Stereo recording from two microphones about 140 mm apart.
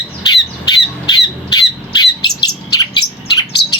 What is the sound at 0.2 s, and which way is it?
Squawk, 30° left (ahead or behind).